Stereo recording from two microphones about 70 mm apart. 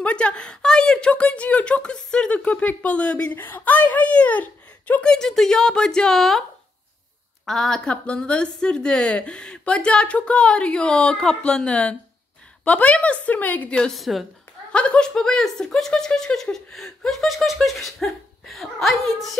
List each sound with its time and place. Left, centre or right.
0.0 s a woman's voice: centre
3.3 s speech: left
5.0 s a woman's voice: centre
7.4 s a woman's voice: centre; by 13.7 s left
13.9 s speech: centre
14.7 s speech: centre